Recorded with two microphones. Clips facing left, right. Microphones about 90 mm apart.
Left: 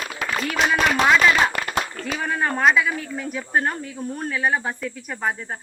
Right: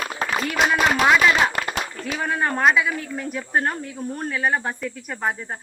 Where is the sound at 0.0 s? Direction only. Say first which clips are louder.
Right 3 dB; 35° right (ahead or behind).